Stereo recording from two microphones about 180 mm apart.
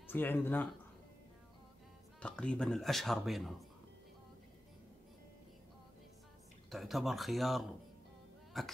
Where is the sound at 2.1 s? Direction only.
5° left (ahead or behind).